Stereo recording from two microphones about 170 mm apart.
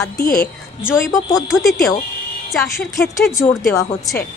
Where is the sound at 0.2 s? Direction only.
65° left (ahead or behind).